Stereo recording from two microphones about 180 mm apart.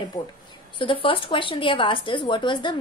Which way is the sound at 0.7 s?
30° left (ahead or behind).